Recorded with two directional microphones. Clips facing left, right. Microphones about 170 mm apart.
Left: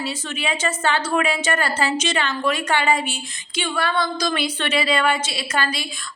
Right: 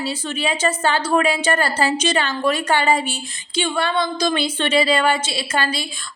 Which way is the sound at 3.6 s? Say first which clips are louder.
Right 2 dB; 25° right (ahead or behind).